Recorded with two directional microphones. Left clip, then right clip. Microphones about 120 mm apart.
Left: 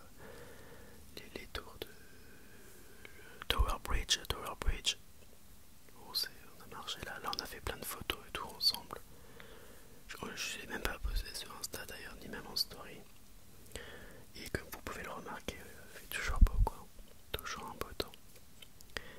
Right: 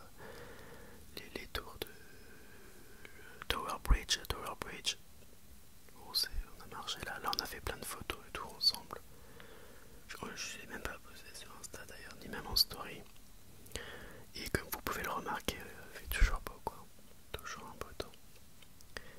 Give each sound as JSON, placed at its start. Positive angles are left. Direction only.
{"t": 0.2, "sound": "whispering", "side_deg": -10}
{"t": 3.0, "sound": "whispering", "side_deg": 5}
{"t": 6.0, "sound": "whispering", "side_deg": -5}
{"t": 10.3, "sound": "whispering", "side_deg": 15}
{"t": 12.3, "sound": "whispering", "side_deg": -10}
{"t": 16.2, "sound": "whispering", "side_deg": 0}
{"t": 17.3, "sound": "whispering", "side_deg": 20}
{"t": 18.9, "sound": "a sound", "side_deg": 15}